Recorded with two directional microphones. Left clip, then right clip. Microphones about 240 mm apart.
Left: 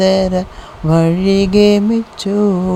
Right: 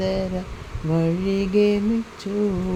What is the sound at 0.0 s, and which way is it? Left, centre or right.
Mantra, left.